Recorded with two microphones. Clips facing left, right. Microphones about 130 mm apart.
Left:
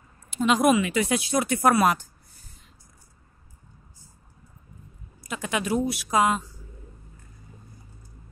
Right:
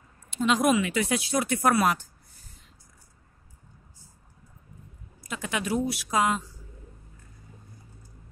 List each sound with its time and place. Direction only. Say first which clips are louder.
0.3 s speech: left 3 dB; 10° left (ahead or behind)
5.2 s speech: left 3 dB; 15° left (ahead or behind)